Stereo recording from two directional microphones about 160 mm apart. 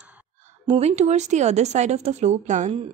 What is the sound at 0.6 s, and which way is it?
Speech, 45° right (ahead or behind).